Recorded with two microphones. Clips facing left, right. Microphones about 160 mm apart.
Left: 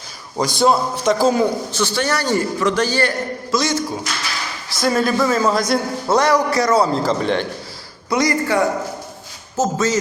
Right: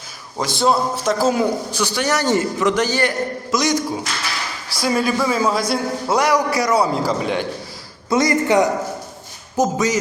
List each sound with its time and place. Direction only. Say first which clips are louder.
0.3 s a man's voice: left 2 dB; centre (ahead or behind)
8.1 s a man's voice: right 2 dB; 20° right (ahead or behind)